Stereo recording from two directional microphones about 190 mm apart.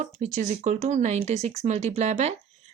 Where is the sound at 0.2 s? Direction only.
40° right (ahead or behind).